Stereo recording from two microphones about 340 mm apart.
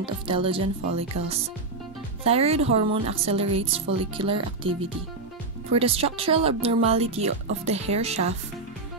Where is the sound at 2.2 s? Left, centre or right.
Centre.